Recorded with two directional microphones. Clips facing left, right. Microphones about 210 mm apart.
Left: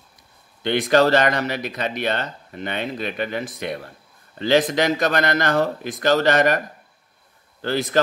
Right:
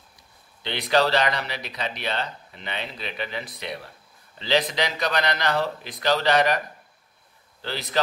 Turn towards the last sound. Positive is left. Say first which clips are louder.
# left 9 dB
turn(degrees=50)  # may be behind; listen again after turning